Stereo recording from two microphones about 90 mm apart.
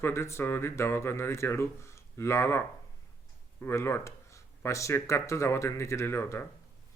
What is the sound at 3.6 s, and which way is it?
Speech, 30° left (ahead or behind).